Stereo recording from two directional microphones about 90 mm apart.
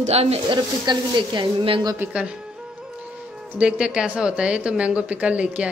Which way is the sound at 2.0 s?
15° right (ahead or behind).